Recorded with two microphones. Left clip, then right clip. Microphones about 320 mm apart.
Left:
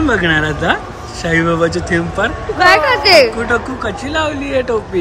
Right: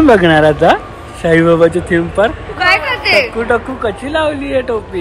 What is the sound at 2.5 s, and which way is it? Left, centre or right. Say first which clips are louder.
Hubbub: left 4 dB; left.